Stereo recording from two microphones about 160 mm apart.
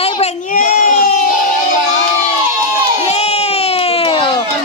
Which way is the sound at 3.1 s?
40° left (ahead or behind).